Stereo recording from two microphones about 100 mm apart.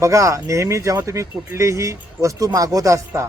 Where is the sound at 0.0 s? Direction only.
30° right (ahead or behind).